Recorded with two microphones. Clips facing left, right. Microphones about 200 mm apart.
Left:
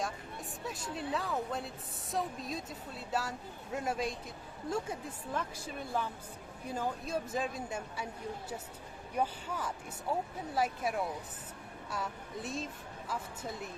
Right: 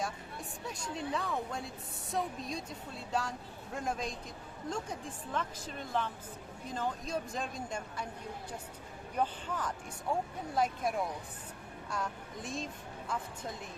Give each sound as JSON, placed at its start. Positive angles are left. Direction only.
{"t": 0.7, "sound": "a woman's voice", "side_deg": 5}
{"t": 9.1, "sound": "a woman's voice", "side_deg": 10}